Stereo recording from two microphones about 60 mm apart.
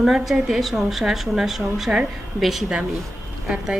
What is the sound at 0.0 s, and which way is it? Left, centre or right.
A woman's voice, centre.